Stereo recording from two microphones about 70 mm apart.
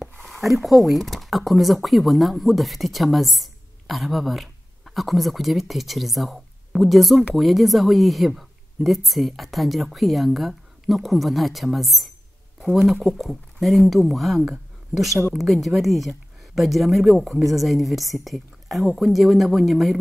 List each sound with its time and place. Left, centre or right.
0.2 s a woman's voice: centre